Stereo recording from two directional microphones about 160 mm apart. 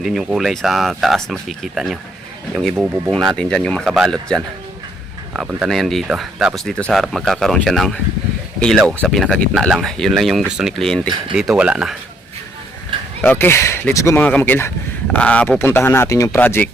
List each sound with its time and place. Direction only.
0.0 s speech: centre (ahead or behind)
12.9 s a sound: 30° right (ahead or behind)
13.2 s speech: 10° left (ahead or behind)